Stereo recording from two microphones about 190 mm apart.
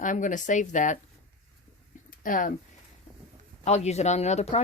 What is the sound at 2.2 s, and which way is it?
Speech, 45° left (ahead or behind).